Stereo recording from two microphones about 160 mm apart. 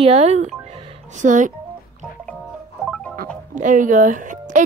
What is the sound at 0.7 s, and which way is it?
Music, 45° right (ahead or behind).